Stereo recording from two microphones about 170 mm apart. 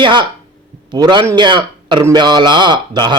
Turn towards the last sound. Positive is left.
turn(degrees=-25)  # may be behind; listen again after turning